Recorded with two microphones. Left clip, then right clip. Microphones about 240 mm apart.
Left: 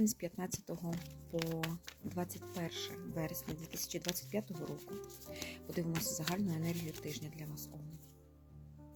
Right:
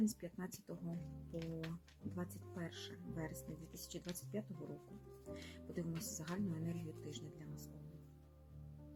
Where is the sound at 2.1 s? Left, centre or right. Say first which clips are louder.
Left 8 dB; left.